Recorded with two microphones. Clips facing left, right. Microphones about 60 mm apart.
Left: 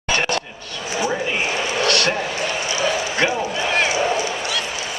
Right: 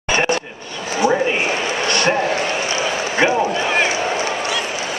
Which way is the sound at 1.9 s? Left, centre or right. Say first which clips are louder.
Right 4 dB; centre.